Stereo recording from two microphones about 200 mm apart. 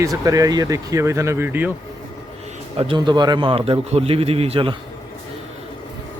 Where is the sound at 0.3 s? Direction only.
15° right (ahead or behind).